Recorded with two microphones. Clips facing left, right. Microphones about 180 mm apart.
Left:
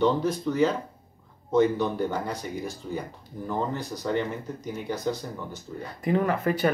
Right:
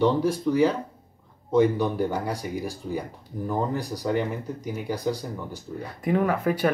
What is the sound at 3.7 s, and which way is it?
Speech, 35° right (ahead or behind).